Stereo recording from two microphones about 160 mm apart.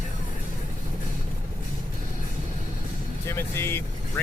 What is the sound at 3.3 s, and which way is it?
Speech, 15° left (ahead or behind).